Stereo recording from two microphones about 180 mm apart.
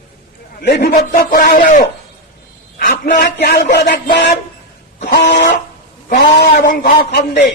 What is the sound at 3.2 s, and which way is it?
Speech, 65° left (ahead or behind).